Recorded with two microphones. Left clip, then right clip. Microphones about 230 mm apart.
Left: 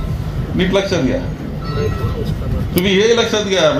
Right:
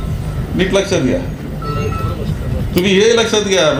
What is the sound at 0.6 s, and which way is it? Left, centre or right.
Speech, right.